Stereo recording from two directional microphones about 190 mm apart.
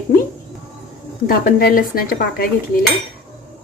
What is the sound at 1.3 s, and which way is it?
A woman's voice, 50° left (ahead or behind).